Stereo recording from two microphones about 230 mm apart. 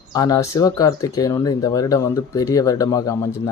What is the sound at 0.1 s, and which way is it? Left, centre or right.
Speech, centre.